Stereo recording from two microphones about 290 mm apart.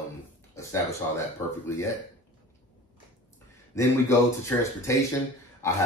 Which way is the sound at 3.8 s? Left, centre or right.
Centre.